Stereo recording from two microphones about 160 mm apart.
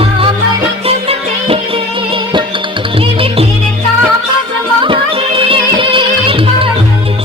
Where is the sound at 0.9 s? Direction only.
40° right (ahead or behind).